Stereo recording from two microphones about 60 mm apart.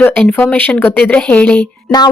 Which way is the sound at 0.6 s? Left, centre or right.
Left.